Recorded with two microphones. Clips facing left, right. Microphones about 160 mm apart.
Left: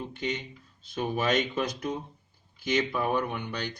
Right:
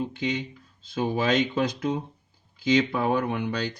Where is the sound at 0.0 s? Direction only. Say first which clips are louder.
Right 5 dB; 90° right.